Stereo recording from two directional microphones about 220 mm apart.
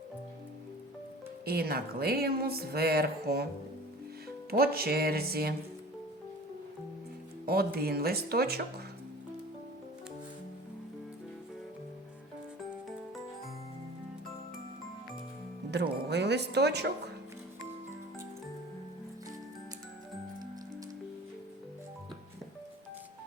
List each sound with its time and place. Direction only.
1.5 s speech: 45° right (ahead or behind)
4.5 s speech: 45° right (ahead or behind)
7.4 s speech: 45° right (ahead or behind)
15.7 s music: 50° right (ahead or behind)